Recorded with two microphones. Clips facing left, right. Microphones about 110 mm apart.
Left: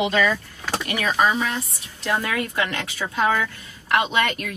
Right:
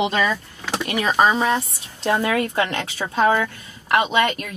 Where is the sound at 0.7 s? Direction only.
15° right (ahead or behind).